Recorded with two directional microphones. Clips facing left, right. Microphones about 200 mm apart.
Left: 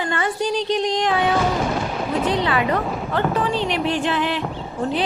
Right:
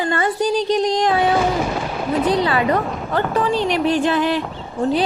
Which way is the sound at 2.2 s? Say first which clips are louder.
Right 3 dB; 35° right (ahead or behind).